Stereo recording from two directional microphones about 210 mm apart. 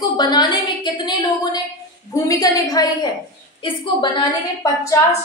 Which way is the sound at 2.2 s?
15° left (ahead or behind).